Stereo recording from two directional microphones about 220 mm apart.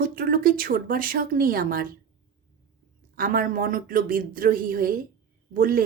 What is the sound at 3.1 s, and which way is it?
A woman's voice, 40° right (ahead or behind).